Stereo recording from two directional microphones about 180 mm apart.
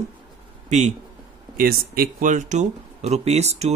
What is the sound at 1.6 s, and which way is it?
Speech, 55° right (ahead or behind).